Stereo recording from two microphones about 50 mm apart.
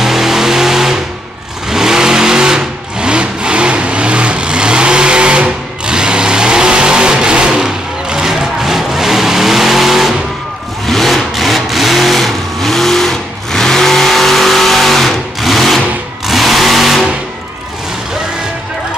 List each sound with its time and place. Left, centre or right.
0.0 s vehicle: centre